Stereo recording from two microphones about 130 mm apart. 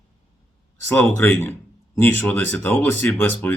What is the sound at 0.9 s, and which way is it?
Speech, 15° left (ahead or behind).